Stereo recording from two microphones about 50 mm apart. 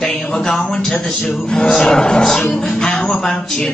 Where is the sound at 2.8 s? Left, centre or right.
Centre.